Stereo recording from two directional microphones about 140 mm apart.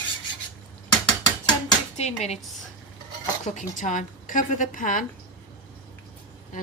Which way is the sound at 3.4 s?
65° left (ahead or behind).